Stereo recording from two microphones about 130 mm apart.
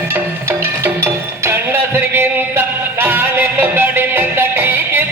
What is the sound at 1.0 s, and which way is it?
Music, 20° right (ahead or behind).